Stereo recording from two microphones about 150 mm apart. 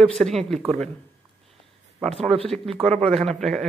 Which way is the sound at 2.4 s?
40° right (ahead or behind).